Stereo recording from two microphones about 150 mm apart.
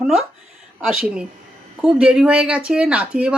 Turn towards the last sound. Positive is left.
turn(degrees=-5)  # may be behind; listen again after turning